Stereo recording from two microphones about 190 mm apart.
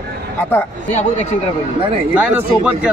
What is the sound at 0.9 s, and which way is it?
Speech, 40° left (ahead or behind).